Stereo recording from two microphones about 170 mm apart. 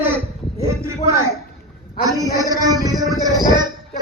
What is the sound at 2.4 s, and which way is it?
Music, 20° right (ahead or behind).